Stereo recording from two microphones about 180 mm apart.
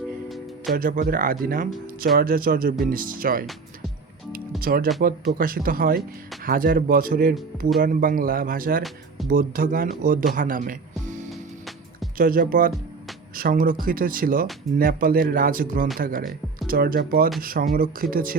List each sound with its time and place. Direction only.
0.7 s speech: 50° right (ahead or behind)
4.6 s speech: 55° right (ahead or behind)
12.1 s speech: 50° right (ahead or behind)